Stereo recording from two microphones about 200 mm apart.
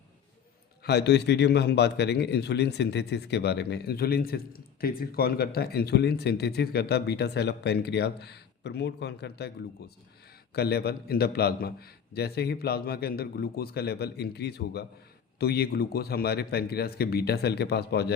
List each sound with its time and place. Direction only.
0.9 s a man's voice: 55° left (ahead or behind)
10.5 s a man's voice: 55° left (ahead or behind)